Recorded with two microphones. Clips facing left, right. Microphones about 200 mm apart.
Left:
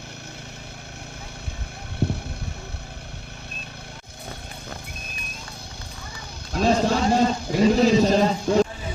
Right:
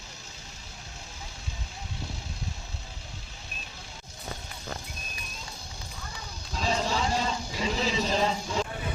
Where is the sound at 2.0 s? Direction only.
60° left (ahead or behind).